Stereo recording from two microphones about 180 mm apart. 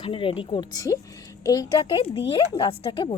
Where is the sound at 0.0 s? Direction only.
30° left (ahead or behind).